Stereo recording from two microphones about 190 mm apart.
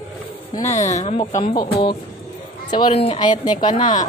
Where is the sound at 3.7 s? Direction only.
40° left (ahead or behind).